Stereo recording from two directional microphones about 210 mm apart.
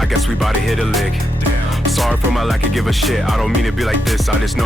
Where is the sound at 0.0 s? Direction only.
Centre (ahead or behind).